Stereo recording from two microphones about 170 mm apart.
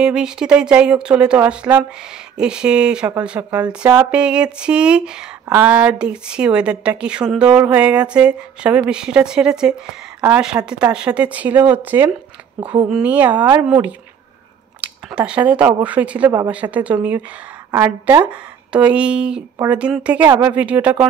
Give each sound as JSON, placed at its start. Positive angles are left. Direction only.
{"t": 0.0, "sound": "speech", "side_deg": -5}